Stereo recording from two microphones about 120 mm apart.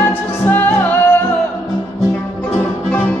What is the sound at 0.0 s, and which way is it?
Music, 15° left (ahead or behind).